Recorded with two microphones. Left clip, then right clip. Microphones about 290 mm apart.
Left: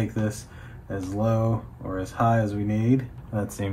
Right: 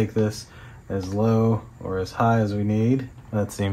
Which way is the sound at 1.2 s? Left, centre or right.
Right.